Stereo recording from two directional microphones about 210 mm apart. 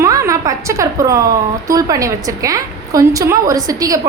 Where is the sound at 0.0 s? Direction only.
15° right (ahead or behind).